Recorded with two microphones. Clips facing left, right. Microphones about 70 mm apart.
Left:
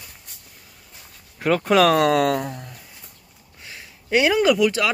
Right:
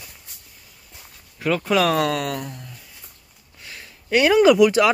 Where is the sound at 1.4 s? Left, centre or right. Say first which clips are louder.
Left 3 dB; left.